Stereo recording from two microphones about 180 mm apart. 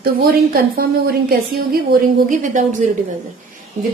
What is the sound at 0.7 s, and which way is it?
Speech, 55° right (ahead or behind).